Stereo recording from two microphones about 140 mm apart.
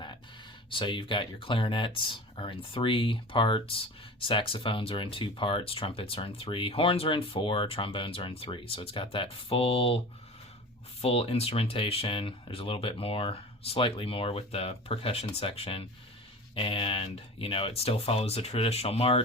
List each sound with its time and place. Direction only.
0.7 s speech: 35° left (ahead or behind)
11.0 s speech: 45° left (ahead or behind)